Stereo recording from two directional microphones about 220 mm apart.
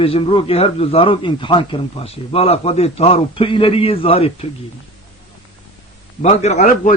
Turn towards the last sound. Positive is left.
turn(degrees=30)  # may be behind; listen again after turning